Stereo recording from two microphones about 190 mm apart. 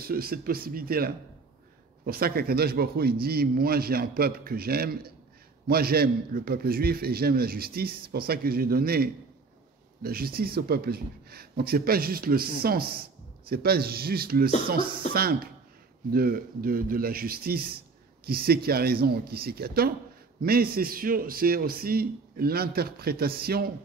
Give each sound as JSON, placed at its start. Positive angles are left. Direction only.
{"t": 0.0, "sound": "a man's voice", "side_deg": -50}
{"t": 16.1, "sound": "a man's voice", "side_deg": -50}